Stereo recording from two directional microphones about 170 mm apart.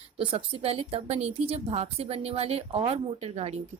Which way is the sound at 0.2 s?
30° right (ahead or behind).